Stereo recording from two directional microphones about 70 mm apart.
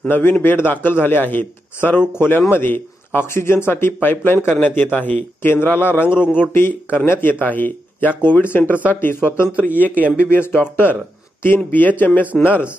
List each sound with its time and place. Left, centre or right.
0.1 s a man's voice: left
9.8 s a man's voice: left